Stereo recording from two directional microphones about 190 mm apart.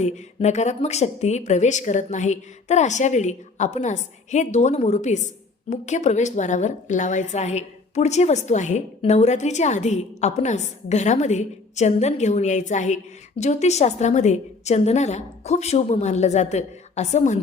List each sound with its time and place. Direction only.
0.0 s a woman's voice: 35° left (ahead or behind)